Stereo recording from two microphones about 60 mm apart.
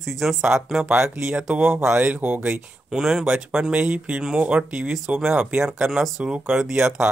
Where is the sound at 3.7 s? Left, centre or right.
Centre.